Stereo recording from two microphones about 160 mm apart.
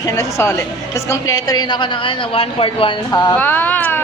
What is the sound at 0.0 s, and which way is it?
A woman's voice, 20° left (ahead or behind).